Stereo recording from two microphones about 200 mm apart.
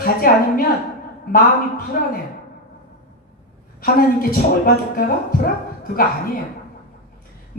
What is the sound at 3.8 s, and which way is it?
Speech, 45° left (ahead or behind).